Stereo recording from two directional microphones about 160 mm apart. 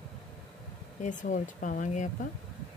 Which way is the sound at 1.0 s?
50° left (ahead or behind).